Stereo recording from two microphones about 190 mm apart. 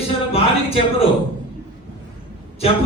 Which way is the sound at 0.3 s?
30° left (ahead or behind).